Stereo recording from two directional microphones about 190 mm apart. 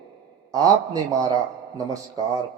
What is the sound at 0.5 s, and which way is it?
A man's voice, 20° right (ahead or behind).